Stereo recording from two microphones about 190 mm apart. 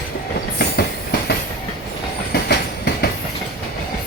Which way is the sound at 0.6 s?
55° left (ahead or behind).